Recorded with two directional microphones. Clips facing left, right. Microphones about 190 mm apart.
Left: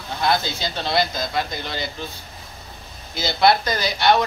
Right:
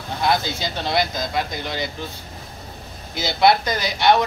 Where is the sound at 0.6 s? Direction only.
15° right (ahead or behind).